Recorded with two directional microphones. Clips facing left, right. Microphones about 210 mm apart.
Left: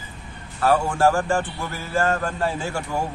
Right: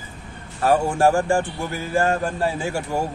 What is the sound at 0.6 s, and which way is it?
A man's voice, 20° right (ahead or behind).